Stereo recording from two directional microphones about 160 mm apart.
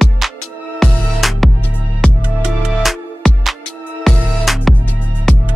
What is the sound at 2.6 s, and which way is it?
Music, centre (ahead or behind).